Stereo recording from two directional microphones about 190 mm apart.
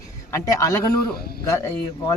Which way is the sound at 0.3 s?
20° left (ahead or behind).